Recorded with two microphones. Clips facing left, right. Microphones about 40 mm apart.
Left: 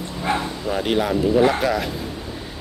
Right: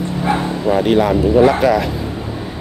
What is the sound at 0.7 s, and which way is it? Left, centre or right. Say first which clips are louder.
Speech: right 9 dB; right.